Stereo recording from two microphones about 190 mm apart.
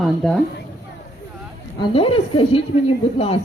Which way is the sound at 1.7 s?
30° left (ahead or behind).